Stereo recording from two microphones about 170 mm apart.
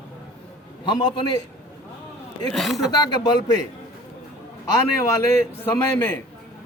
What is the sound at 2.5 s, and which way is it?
Speech, centre (ahead or behind).